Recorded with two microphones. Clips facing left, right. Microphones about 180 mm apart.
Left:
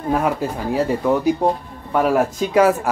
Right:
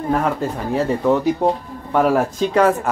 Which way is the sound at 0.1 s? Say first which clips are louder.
Left 1 dB; 5° left (ahead or behind).